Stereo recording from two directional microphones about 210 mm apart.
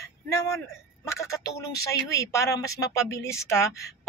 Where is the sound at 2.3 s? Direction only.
15° left (ahead or behind).